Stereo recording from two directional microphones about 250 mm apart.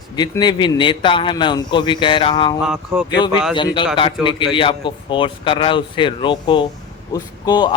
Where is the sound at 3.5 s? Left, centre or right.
Centre.